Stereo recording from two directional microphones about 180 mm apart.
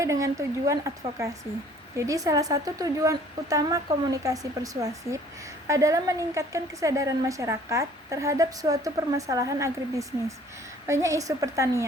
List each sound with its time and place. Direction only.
0.0 s a woman's voice: 15° right (ahead or behind)